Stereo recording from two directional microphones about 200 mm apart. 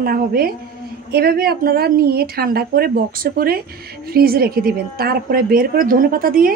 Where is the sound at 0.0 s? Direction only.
50° right (ahead or behind).